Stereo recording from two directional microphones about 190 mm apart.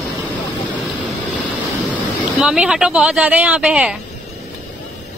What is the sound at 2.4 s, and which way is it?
Speech, 5° right (ahead or behind).